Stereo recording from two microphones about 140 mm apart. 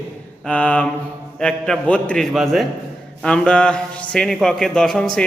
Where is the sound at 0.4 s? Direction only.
10° left (ahead or behind).